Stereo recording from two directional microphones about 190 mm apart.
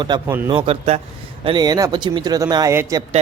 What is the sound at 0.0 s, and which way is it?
Speech, 20° right (ahead or behind).